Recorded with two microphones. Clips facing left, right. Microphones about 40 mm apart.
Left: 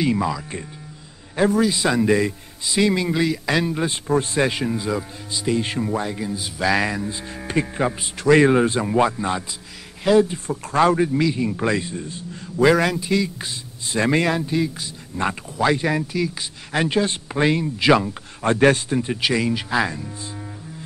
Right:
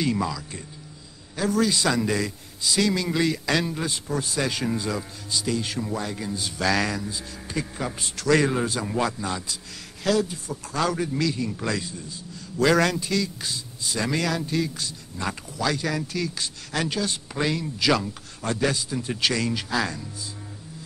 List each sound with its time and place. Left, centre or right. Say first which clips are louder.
0.0 s a man's voice: left 4 dB; centre
1.6 s speech: left 3 dB; centre
3.2 s speech: left 3 dB; centre
3.9 s a man's voice: left 7 dB; left
4.7 s speech: left 4 dB; centre
7.1 s a man's voice: left 5 dB; left
8.0 s a man's voice: left 6 dB; left
12.5 s speech: left 4 dB; centre; by 14.5 s left
14.5 s speech: left 4 dB; centre
15.1 s speech: left 7 dB; left
18.9 s speech: left 4 dB; left